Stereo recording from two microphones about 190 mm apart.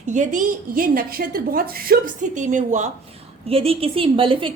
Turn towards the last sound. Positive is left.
turn(degrees=-25)  # may be behind; listen again after turning